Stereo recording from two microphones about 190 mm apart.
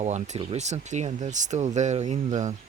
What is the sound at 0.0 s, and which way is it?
Speech, 35° right (ahead or behind).